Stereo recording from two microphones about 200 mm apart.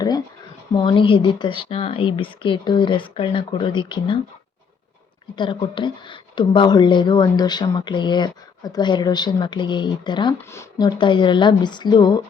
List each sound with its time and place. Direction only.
0.7 s speech: 25° left (ahead or behind)
5.4 s speech: 25° left (ahead or behind)